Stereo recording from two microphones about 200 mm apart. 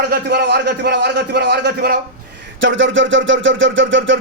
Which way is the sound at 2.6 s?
70° right (ahead or behind).